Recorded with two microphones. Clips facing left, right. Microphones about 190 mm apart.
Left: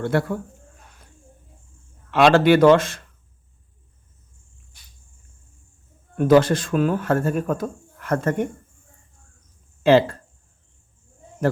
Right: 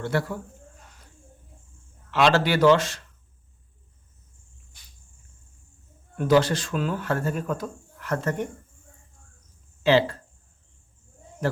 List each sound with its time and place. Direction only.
0.0 s speech: 55° left (ahead or behind)
2.0 s speech: 55° left (ahead or behind)
6.1 s speech: 50° left (ahead or behind)
9.8 s speech: 50° left (ahead or behind)